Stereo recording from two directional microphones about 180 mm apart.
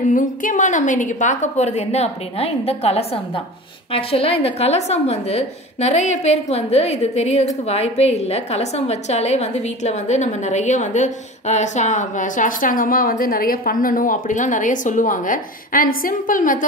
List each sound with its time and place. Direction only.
0.1 s a woman's voice: 45° left (ahead or behind)